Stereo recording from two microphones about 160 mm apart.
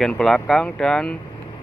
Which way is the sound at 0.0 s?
Centre (ahead or behind).